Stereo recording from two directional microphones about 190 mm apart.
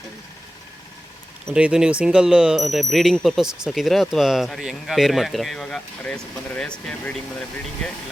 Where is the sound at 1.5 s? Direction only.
5° right (ahead or behind).